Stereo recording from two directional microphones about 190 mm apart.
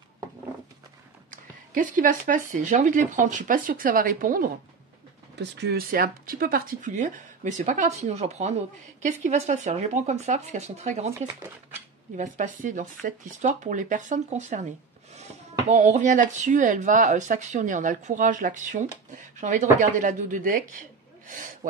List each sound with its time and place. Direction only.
1.3 s speech: 45° right (ahead or behind)
5.3 s speech: 65° right (ahead or behind); by 11.1 s 35° right (ahead or behind)
11.1 s speech: 15° right (ahead or behind)
12.2 s speech: 40° right (ahead or behind)
15.7 s speech: 40° right (ahead or behind)